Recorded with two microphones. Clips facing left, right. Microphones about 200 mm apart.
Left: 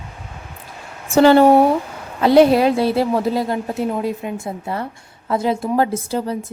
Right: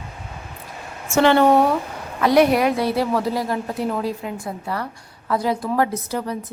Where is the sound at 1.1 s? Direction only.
35° left (ahead or behind).